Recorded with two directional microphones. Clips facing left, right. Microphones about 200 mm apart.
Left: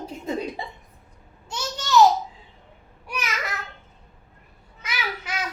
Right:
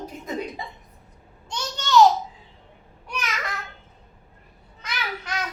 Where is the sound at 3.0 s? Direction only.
5° left (ahead or behind).